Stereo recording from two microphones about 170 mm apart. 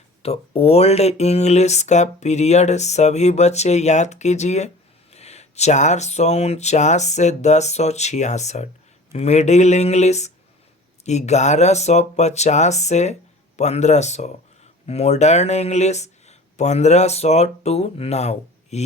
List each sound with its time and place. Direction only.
0.2 s speech: 35° left (ahead or behind)